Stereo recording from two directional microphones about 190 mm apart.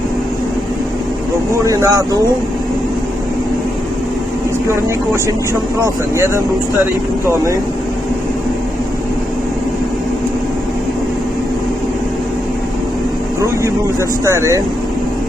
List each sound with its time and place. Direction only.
1.6 s speech: 20° right (ahead or behind)
5.8 s speech: 15° right (ahead or behind)
14.3 s speech: 15° right (ahead or behind)